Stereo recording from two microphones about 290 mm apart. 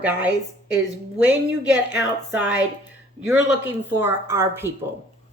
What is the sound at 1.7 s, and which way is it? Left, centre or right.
A woman's voice, centre.